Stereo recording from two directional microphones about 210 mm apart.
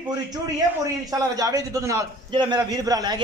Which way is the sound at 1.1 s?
15° right (ahead or behind).